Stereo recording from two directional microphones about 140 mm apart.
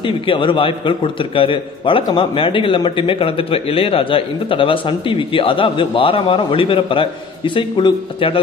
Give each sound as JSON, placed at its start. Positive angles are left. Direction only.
{"t": 0.0, "sound": "a man's voice", "side_deg": 35}